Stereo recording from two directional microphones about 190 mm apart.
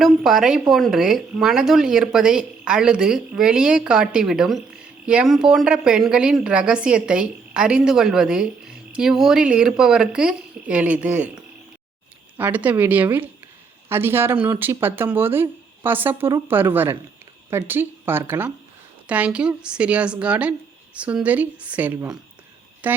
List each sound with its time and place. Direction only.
0.0 s speech: centre (ahead or behind)